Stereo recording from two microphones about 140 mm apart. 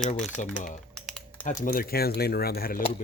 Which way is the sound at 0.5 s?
65° left (ahead or behind).